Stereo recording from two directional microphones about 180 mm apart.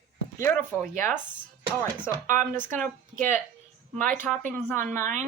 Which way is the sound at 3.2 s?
45° right (ahead or behind).